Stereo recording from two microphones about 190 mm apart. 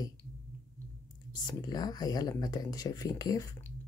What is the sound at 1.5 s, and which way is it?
Speech, 20° left (ahead or behind).